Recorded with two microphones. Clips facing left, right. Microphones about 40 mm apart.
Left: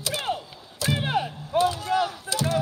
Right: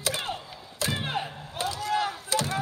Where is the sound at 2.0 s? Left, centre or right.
Right.